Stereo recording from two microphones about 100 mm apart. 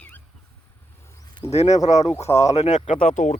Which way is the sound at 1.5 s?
90° left.